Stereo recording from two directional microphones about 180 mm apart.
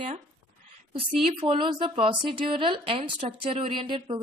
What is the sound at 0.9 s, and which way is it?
A woman's voice, 30° right (ahead or behind).